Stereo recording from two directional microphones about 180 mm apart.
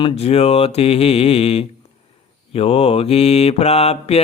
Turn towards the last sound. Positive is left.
turn(degrees=35)  # may be behind; listen again after turning